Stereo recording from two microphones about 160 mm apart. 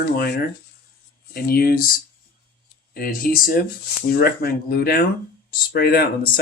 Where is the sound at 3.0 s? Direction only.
65° left (ahead or behind).